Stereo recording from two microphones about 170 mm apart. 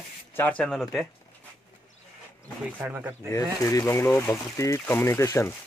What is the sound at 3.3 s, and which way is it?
Speech, 20° left (ahead or behind).